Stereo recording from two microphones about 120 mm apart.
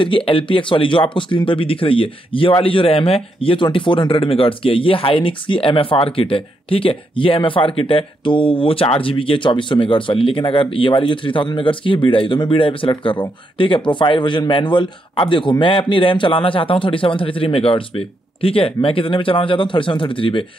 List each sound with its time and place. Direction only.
0.0 s speech: 45° left (ahead or behind)